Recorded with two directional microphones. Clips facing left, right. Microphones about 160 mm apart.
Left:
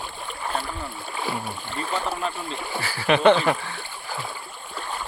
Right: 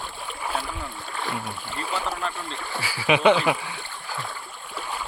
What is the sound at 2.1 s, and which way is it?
Speech, 10° left (ahead or behind).